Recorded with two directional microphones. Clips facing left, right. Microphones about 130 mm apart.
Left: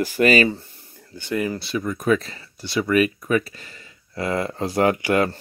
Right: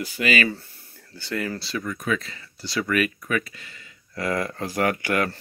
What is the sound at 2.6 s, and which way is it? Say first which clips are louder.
Speech: left 5 dB; 20° left (ahead or behind).